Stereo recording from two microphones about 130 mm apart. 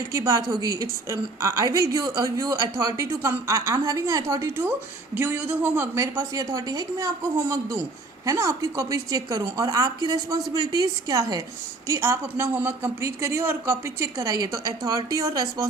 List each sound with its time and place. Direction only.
0.1 s a woman's voice: 25° right (ahead or behind)